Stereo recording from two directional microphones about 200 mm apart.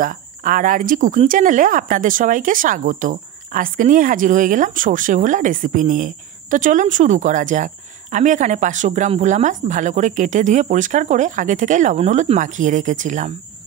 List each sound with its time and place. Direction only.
0.0 s speech: 45° right (ahead or behind)